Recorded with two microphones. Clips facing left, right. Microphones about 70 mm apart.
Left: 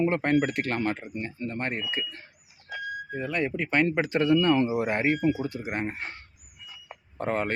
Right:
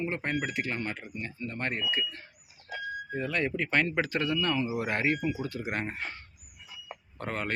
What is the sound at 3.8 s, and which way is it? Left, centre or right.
Speech, left.